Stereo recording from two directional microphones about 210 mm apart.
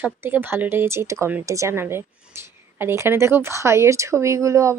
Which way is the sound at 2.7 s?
10° right (ahead or behind).